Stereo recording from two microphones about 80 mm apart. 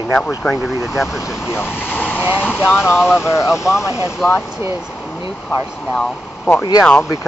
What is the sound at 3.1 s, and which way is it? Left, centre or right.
Speech, left.